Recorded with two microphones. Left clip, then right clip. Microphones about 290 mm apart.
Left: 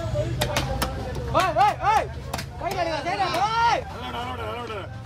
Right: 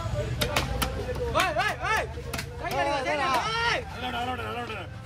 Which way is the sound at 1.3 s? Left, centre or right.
Left.